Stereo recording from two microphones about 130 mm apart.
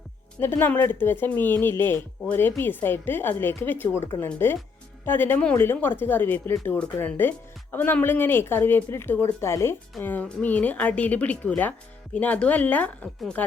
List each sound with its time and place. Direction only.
0.3 s speech: 20° left (ahead or behind)